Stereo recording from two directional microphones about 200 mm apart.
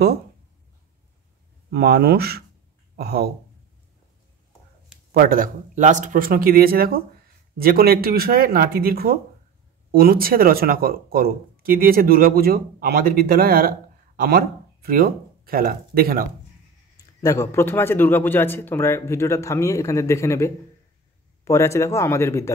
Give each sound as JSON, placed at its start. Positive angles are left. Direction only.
{"t": 1.7, "sound": "speech", "side_deg": -50}
{"t": 5.1, "sound": "speech", "side_deg": -45}
{"t": 17.2, "sound": "speech", "side_deg": 15}